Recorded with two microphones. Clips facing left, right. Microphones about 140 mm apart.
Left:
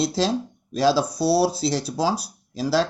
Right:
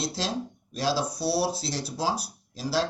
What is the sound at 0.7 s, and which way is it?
Speech, 85° left.